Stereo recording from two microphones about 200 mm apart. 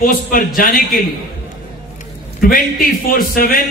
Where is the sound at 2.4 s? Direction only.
45° left (ahead or behind).